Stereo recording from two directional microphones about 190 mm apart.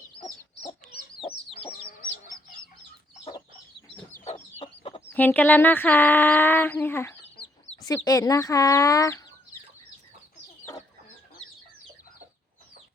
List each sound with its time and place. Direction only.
1.2 s chicken: 30° left (ahead or behind)
4.3 s chicken: 35° left (ahead or behind)
5.1 s speech: 10° left (ahead or behind)